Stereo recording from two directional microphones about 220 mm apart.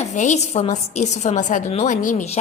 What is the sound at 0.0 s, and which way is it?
A woman's voice, 30° left (ahead or behind).